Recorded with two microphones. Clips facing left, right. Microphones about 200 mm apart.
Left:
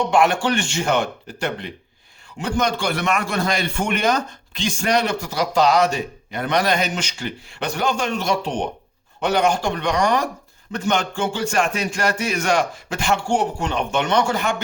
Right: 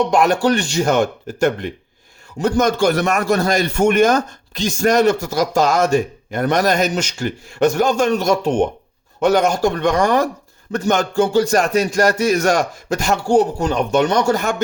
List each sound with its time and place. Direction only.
0.1 s a man's voice: 40° right (ahead or behind)